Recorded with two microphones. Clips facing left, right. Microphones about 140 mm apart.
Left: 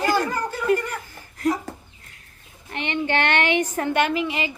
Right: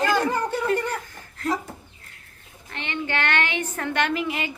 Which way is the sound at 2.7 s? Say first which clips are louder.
Left 5 dB; 20° left (ahead or behind).